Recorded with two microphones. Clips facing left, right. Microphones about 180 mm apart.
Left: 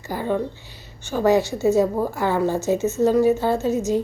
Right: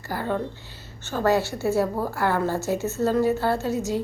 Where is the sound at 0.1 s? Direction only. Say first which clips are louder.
Left 3 dB; 15° left (ahead or behind).